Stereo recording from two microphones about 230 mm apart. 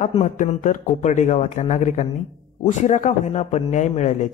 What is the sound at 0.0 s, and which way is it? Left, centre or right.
Speech, left.